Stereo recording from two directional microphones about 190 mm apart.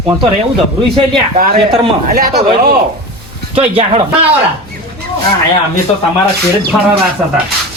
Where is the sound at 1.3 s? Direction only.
35° right (ahead or behind).